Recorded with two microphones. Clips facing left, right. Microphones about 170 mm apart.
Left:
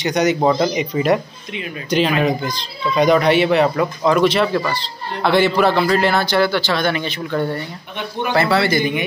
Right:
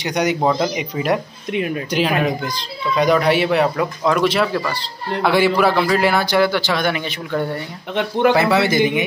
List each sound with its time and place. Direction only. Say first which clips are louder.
0.0 s a man's voice: left 2 dB; 10° right (ahead or behind)
0.4 s a man's voice: left 2 dB; 5° left (ahead or behind)
7.9 s speech: right 9 dB; 90° right
8.4 s a man's voice: right 1 dB; 15° right (ahead or behind)